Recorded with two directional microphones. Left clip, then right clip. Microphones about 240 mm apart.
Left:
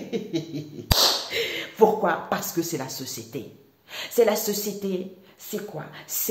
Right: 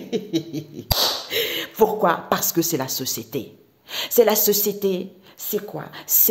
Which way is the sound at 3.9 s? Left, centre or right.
Right.